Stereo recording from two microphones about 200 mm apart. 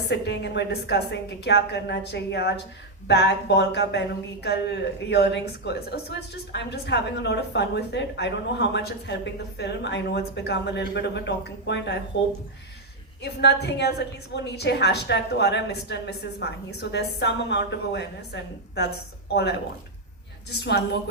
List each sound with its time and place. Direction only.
0.1 s a woman's voice: 60° left (ahead or behind)
13.2 s a woman's voice: 55° left (ahead or behind)